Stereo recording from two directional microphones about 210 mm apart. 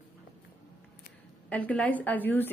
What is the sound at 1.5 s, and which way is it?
A woman's voice, 5° left (ahead or behind).